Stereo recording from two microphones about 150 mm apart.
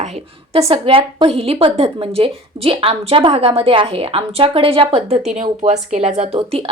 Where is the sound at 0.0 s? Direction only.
45° right (ahead or behind).